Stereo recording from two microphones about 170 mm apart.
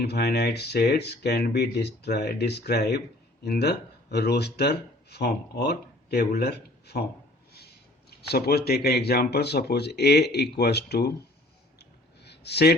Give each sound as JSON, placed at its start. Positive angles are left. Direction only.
{"t": 0.0, "sound": "speech", "side_deg": 70}
{"t": 8.3, "sound": "speech", "side_deg": 65}
{"t": 11.8, "sound": "a sound", "side_deg": 75}